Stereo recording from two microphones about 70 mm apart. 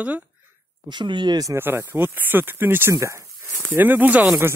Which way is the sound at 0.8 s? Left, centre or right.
Right.